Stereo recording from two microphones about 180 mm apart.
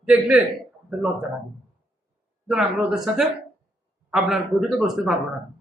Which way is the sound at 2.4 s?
Centre (ahead or behind).